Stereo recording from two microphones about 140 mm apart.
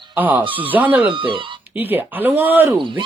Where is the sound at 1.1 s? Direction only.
35° right (ahead or behind).